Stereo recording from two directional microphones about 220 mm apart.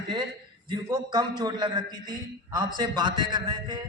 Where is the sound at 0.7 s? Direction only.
20° right (ahead or behind).